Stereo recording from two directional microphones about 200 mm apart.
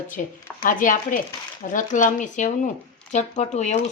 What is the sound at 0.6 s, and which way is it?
A woman's voice, 40° left (ahead or behind).